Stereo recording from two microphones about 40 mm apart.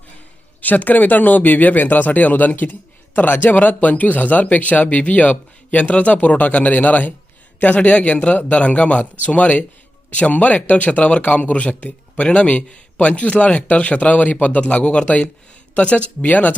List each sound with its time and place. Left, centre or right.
0.6 s speech: left
16.2 s speech: left